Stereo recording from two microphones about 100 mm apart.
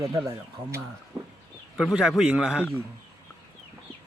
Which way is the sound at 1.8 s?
5° right (ahead or behind).